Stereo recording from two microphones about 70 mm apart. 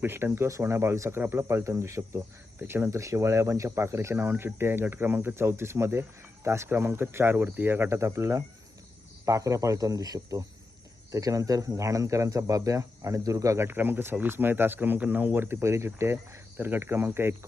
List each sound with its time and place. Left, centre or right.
0.0 s speech: right
2.6 s speech: right
13.7 s speech: right